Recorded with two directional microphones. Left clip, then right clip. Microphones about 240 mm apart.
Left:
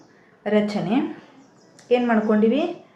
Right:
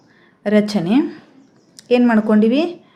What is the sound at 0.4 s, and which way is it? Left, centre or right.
A woman's voice, right.